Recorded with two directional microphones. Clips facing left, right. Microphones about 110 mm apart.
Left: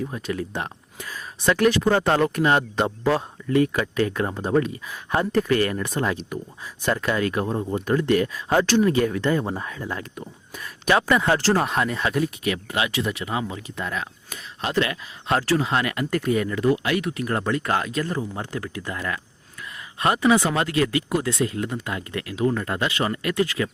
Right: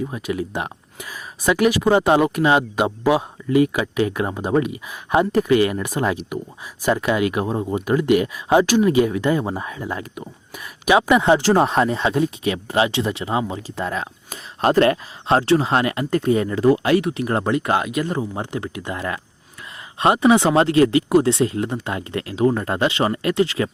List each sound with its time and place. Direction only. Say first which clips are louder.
0.1 s speech: right 3 dB; 10° right (ahead or behind); by 14.9 s 45° right (ahead or behind)
15.3 s speech: right 5 dB; 30° right (ahead or behind)